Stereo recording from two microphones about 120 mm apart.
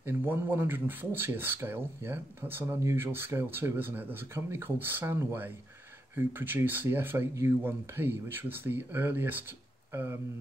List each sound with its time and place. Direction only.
0.0 s speech: 20° right (ahead or behind)